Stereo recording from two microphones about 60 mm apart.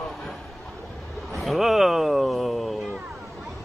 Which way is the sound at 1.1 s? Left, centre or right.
Centre.